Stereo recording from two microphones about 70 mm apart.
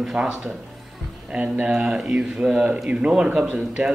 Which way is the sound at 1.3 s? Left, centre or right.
Centre.